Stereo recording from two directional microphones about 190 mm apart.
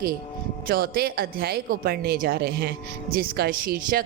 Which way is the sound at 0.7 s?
50° right (ahead or behind).